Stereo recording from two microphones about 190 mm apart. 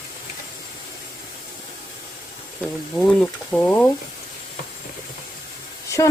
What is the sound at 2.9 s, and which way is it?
Speech, 5° left (ahead or behind).